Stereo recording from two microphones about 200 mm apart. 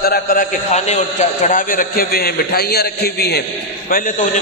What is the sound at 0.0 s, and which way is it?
A man's voice, 50° left (ahead or behind).